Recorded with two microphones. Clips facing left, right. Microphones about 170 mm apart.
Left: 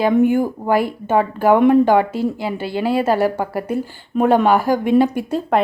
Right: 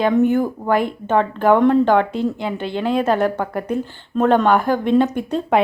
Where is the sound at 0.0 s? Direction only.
10° left (ahead or behind).